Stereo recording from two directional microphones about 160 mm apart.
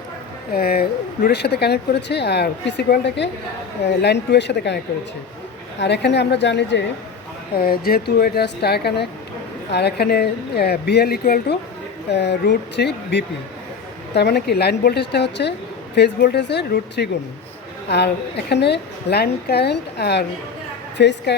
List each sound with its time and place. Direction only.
0.5 s speech: 75° left (ahead or behind); by 4.8 s 90° left
5.8 s speech: 90° left
7.5 s speech: 70° left (ahead or behind)
12.1 s speech: 90° left